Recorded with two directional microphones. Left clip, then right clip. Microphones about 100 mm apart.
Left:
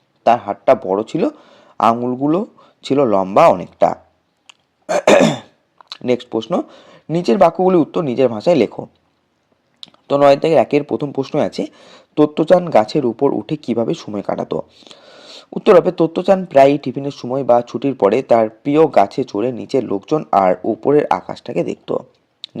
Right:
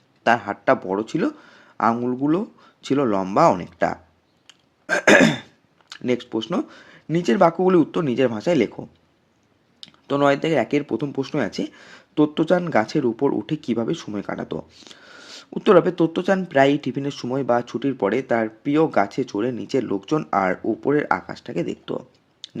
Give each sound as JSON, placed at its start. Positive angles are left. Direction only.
{"t": 0.2, "sound": "a man's voice", "side_deg": 10}
{"t": 0.9, "sound": "speech", "side_deg": 25}
{"t": 4.4, "sound": "throat clearing", "side_deg": 30}
{"t": 6.1, "sound": "speech", "side_deg": 30}
{"t": 14.3, "sound": "speech", "side_deg": 35}
{"t": 14.8, "sound": "a sound", "side_deg": 25}
{"t": 15.2, "sound": "a man's voice", "side_deg": 20}
{"t": 17.7, "sound": "speech", "side_deg": 30}
{"t": 20.7, "sound": "speech", "side_deg": 30}